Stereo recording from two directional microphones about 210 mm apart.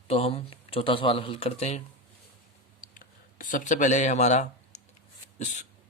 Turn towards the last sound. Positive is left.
turn(degrees=35)  # may be behind; listen again after turning